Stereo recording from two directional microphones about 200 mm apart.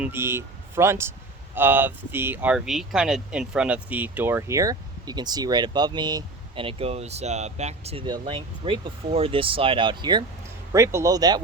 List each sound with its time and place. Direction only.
0.0 s speech: 10° right (ahead or behind)